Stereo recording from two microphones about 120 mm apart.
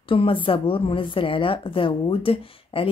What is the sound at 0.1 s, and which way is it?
A woman's voice, 50° left (ahead or behind).